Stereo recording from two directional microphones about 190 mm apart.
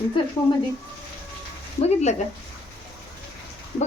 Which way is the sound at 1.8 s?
35° left (ahead or behind).